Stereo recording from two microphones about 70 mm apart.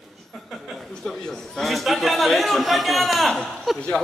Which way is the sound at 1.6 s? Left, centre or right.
Centre.